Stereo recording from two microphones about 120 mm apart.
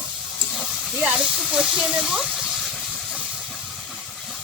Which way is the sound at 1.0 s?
10° right (ahead or behind).